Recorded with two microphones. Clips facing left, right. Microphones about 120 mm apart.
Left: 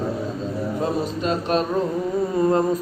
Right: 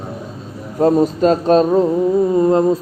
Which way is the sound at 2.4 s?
25° right (ahead or behind).